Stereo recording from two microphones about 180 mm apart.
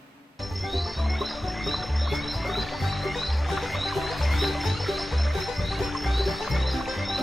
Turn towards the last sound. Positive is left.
turn(degrees=0)  # may be behind; listen again after turning